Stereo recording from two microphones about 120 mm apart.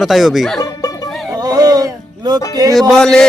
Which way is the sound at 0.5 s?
30° left (ahead or behind).